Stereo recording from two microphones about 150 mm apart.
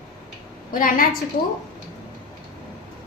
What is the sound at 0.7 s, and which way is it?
Speech, 65° left (ahead or behind).